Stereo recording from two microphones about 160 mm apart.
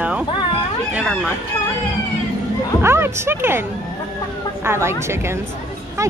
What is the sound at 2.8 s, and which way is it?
Speech, 15° right (ahead or behind).